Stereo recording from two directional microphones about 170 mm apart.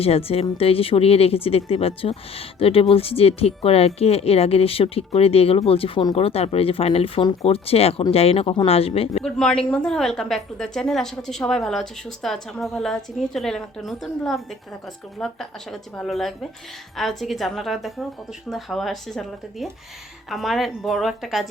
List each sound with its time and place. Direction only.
0.0 s speech: 35° left (ahead or behind)
9.2 s a woman's voice: 5° left (ahead or behind)